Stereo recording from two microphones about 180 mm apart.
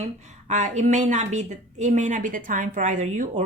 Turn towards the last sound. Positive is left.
turn(degrees=-40)  # may be behind; listen again after turning